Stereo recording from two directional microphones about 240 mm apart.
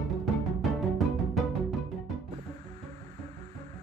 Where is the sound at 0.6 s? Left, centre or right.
Centre.